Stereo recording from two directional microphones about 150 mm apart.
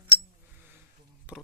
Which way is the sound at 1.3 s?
10° right (ahead or behind).